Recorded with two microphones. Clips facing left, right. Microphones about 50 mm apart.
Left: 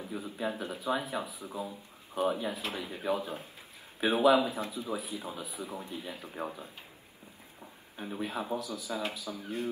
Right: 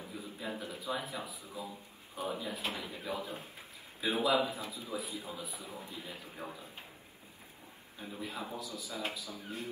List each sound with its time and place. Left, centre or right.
0.0 s speech: left
8.0 s speech: left